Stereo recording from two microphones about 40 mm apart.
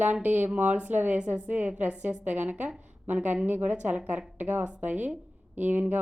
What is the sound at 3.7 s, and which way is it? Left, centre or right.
Speech, right.